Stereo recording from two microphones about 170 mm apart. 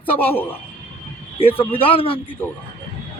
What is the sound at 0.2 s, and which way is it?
Speech, 10° left (ahead or behind).